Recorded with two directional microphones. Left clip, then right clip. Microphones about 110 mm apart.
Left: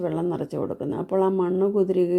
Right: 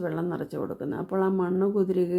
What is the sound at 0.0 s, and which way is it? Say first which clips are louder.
Speech: left 4 dB; 20° left (ahead or behind).